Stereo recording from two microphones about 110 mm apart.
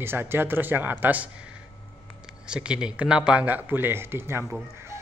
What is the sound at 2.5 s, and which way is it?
Speech, 10° right (ahead or behind).